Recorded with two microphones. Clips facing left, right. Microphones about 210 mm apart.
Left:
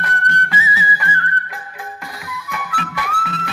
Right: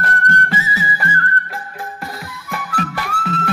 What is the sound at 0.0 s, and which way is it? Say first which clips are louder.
Music: right 3 dB; 45° right (ahead or behind).